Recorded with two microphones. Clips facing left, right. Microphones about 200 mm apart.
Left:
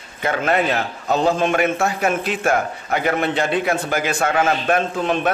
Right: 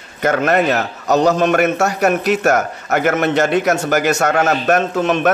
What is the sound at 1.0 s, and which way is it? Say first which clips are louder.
Speech: right 4 dB; 75° right (ahead or behind).